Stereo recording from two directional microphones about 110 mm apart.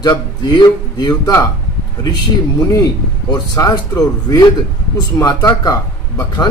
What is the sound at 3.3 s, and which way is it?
A man's voice, 35° left (ahead or behind).